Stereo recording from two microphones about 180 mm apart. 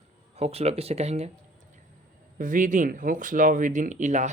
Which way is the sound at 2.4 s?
45° right (ahead or behind).